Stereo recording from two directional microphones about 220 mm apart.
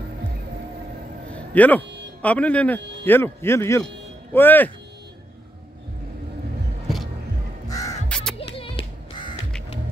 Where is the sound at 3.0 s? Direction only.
10° left (ahead or behind).